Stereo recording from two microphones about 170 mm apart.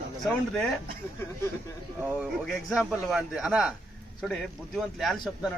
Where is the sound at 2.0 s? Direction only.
5° right (ahead or behind).